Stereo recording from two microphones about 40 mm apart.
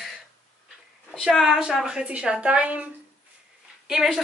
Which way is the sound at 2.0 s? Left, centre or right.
Right.